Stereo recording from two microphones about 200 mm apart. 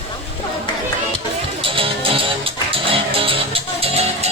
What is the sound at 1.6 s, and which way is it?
Music, 25° right (ahead or behind).